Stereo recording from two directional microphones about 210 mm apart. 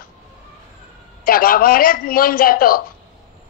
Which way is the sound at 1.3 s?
45° left (ahead or behind).